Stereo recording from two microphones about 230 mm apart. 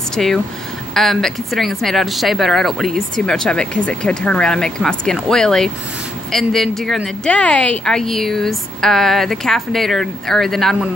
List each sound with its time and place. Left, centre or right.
0.1 s speech: centre